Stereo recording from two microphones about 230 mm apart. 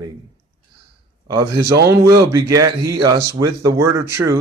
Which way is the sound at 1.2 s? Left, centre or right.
Centre.